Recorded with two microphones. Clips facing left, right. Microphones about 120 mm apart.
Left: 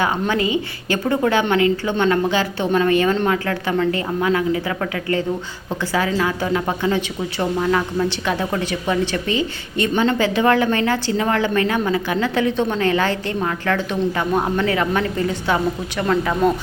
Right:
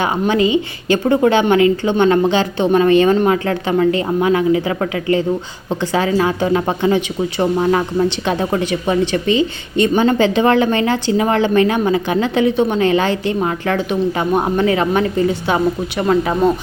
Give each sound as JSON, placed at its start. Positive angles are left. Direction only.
{"t": 0.0, "sound": "a woman's voice", "side_deg": -20}